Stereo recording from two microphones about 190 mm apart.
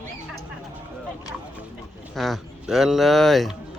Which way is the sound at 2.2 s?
Centre (ahead or behind).